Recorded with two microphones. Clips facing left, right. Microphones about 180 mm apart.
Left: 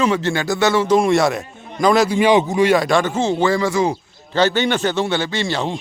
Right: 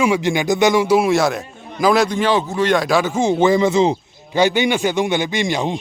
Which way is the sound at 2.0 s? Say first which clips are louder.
Left 3 dB; 10° left (ahead or behind).